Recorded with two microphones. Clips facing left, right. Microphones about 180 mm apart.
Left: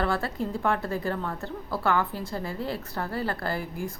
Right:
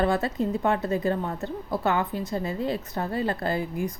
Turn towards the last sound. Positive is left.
turn(degrees=-20)  # may be behind; listen again after turning